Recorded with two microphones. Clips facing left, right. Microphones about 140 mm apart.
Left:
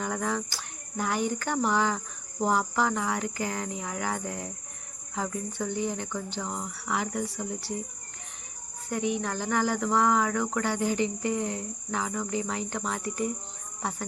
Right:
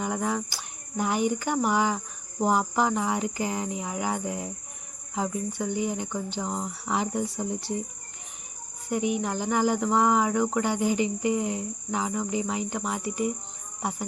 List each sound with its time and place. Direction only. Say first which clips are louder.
0.0 s cricket: right 2 dB; 15° right (ahead or behind)
8.9 s cricket: right 2 dB; 15° right (ahead or behind)